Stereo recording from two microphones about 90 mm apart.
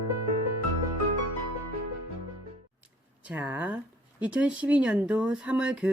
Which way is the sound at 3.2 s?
20° right (ahead or behind).